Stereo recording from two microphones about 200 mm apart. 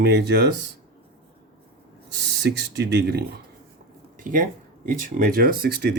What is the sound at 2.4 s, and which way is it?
Speech, 60° right (ahead or behind).